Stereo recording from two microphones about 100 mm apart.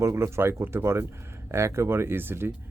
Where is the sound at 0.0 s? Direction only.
25° right (ahead or behind).